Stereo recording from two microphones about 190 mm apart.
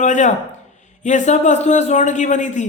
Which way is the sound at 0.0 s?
40° left (ahead or behind).